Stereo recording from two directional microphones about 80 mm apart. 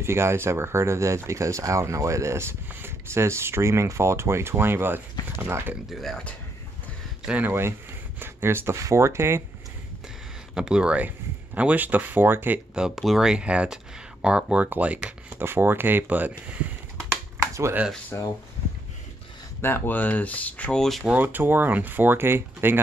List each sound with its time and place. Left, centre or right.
0.0 s speech: right
5.9 s speech: centre
7.2 s speech: right
10.5 s speech: centre; by 12.5 s right
12.7 s speech: centre
16.9 s computer keyboard: right
19.6 s speech: left
21.0 s speech: right